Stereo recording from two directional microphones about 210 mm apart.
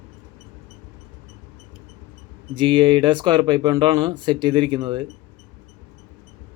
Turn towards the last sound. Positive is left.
turn(degrees=-20)  # may be behind; listen again after turning